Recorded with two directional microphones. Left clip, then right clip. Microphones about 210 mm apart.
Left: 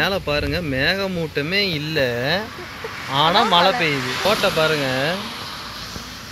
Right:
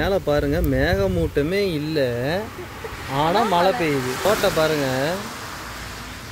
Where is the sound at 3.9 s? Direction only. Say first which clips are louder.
Left 1 dB; 40° right (ahead or behind).